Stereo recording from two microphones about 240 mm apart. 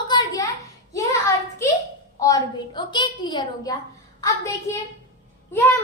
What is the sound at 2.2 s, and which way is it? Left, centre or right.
A woman's voice, centre.